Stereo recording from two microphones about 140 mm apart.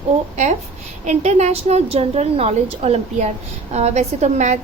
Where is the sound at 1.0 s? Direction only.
55° right (ahead or behind).